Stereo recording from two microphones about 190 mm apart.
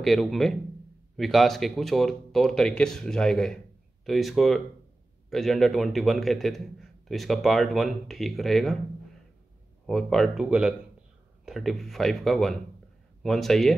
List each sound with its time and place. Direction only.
0.0 s a man's voice: centre (ahead or behind)
9.8 s a man's voice: centre (ahead or behind)